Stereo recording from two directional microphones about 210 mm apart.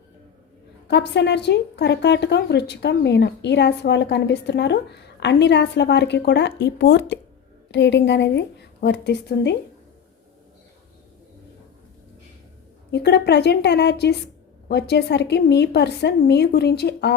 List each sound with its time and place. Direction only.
0.9 s a woman's voice: 55° left (ahead or behind)
12.9 s speech: 55° left (ahead or behind)